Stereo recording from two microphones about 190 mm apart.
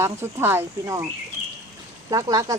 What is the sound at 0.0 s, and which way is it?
Speech, 15° right (ahead or behind).